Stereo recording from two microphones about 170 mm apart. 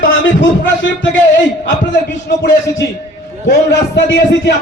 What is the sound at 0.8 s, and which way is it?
Speech, 90° left.